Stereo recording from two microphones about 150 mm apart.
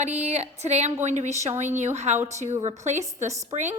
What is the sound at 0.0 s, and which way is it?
A woman's voice, 50° right (ahead or behind).